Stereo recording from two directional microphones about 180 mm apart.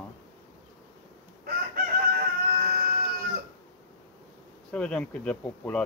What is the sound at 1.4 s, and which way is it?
Chicken, 55° right (ahead or behind).